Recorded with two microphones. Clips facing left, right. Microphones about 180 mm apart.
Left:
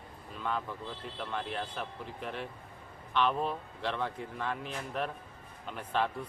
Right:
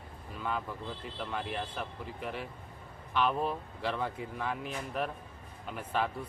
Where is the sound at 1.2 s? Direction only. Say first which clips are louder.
Even; 5° right (ahead or behind).